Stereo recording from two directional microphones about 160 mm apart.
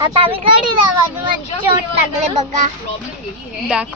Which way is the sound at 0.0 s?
30° right (ahead or behind).